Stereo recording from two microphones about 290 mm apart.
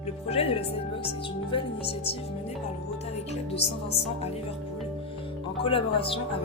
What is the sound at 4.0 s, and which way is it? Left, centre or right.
Speech, left.